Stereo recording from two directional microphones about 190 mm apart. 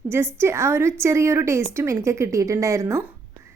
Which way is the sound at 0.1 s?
15° right (ahead or behind).